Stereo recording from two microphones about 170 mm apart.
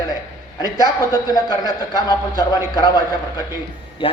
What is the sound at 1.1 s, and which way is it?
A man's voice, 20° left (ahead or behind).